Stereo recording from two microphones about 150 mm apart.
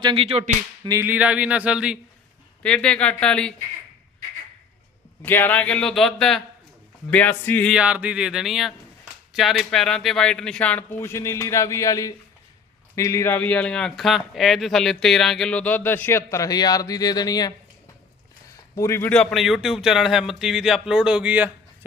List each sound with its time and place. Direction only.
0.0 s a sound: 35° right (ahead or behind)
0.9 s speech: 15° right (ahead or behind)
2.6 s speech: 5° left (ahead or behind)
5.2 s speech: 10° left (ahead or behind)
7.7 s speech: 5° right (ahead or behind); by 17.5 s 25° left (ahead or behind)
18.8 s speech: 15° left (ahead or behind); by 21.5 s 10° right (ahead or behind)